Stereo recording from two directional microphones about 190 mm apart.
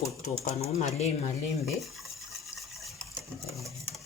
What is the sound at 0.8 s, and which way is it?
Speech, 35° left (ahead or behind).